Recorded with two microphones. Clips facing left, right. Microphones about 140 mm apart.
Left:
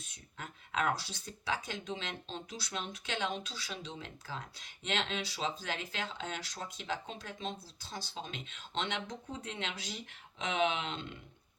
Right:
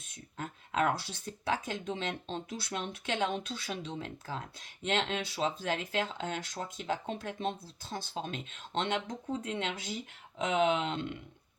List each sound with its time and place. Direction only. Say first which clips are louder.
0.3 s speech: right 4 dB; 45° right (ahead or behind)